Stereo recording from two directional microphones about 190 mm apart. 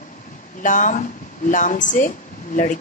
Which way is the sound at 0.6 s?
45° left (ahead or behind).